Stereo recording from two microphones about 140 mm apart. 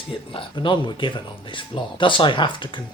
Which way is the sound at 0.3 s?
35° left (ahead or behind).